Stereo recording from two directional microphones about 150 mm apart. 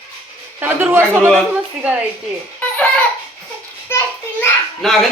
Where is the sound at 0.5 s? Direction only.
15° right (ahead or behind).